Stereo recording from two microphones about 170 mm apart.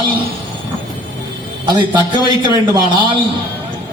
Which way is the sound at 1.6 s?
25° right (ahead or behind).